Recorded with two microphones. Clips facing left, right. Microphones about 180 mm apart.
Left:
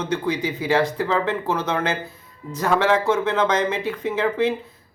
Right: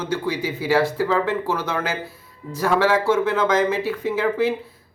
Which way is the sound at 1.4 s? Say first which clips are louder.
Left 1 dB; 25° left (ahead or behind).